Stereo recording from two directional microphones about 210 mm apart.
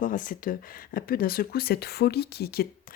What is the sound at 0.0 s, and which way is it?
Speech, 40° left (ahead or behind).